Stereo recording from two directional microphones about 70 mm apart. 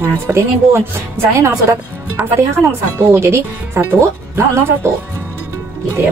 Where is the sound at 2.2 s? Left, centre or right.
Right.